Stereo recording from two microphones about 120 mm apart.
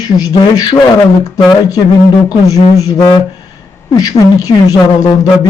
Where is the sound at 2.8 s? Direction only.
35° left (ahead or behind).